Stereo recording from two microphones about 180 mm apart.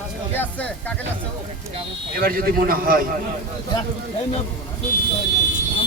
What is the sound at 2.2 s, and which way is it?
Speech, 55° right (ahead or behind).